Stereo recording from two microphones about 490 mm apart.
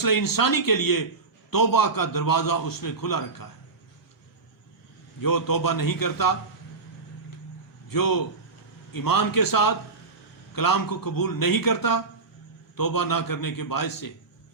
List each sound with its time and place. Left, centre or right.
0.0 s a man's voice: left
5.2 s a man's voice: left
7.9 s a man's voice: left